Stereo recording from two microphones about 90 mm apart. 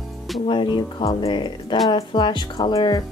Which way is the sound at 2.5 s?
50° left (ahead or behind).